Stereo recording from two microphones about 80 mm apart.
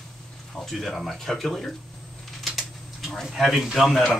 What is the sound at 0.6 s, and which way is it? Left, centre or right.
Speech, centre.